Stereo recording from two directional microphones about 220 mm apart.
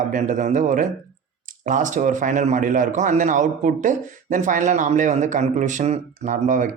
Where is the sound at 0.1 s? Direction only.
35° right (ahead or behind).